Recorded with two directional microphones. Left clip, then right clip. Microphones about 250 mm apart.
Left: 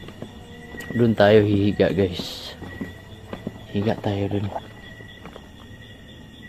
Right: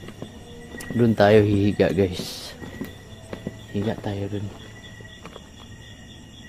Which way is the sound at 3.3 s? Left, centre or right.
Centre.